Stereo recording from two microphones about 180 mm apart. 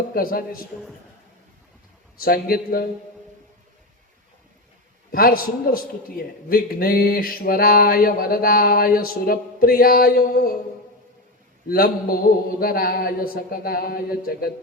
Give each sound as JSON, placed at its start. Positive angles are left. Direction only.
{"t": 0.1, "sound": "a man's voice", "side_deg": 55}
{"t": 2.2, "sound": "a man's voice", "side_deg": 55}
{"t": 5.1, "sound": "a man's voice", "side_deg": 55}
{"t": 11.7, "sound": "a man's voice", "side_deg": 55}